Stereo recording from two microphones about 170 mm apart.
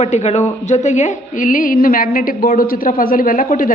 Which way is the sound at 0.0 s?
40° left (ahead or behind).